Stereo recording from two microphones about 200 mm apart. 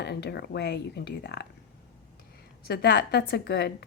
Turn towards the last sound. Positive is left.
turn(degrees=55)  # may be behind; listen again after turning